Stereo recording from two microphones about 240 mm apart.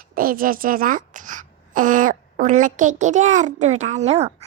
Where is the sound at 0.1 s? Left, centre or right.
Right.